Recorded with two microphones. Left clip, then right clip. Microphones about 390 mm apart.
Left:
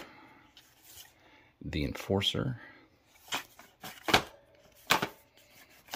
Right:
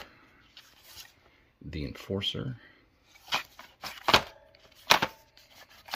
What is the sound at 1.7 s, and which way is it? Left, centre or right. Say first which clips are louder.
Speech: left 4 dB; centre.